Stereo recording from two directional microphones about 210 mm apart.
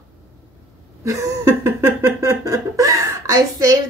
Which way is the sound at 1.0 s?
15° right (ahead or behind).